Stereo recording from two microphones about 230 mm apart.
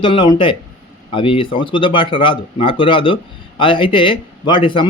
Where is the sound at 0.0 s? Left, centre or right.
Left.